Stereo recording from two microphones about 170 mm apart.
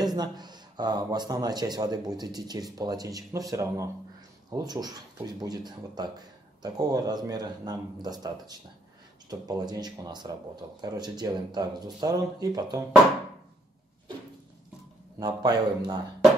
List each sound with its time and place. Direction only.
0.0 s speech: 25° right (ahead or behind)
15.1 s speech: 25° right (ahead or behind)